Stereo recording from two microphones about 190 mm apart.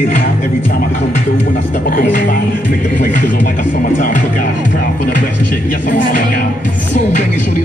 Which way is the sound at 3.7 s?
45° left (ahead or behind).